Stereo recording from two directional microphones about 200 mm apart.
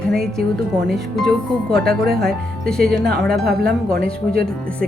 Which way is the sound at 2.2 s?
Centre (ahead or behind).